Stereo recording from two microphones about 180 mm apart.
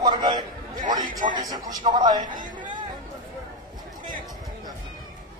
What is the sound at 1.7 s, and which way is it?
Speech, 25° right (ahead or behind).